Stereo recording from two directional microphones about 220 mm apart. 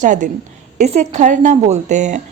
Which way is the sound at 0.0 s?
35° right (ahead or behind).